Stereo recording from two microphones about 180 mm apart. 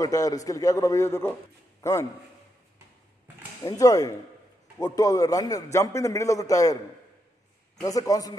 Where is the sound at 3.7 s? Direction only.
20° left (ahead or behind).